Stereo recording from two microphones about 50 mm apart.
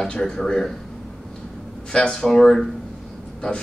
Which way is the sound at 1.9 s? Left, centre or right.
Centre.